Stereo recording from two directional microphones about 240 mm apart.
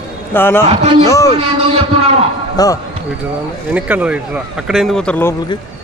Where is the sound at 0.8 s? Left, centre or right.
Right.